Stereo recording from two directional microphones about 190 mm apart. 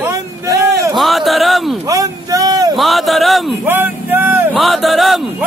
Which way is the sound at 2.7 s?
Centre (ahead or behind).